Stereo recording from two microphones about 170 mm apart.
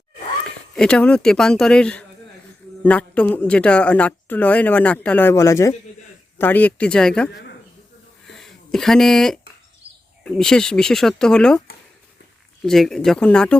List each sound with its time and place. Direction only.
0.8 s speech: 5° left (ahead or behind)
8.3 s a sound: centre (ahead or behind)
10.2 s speech: 5° left (ahead or behind)
12.6 s speech: centre (ahead or behind)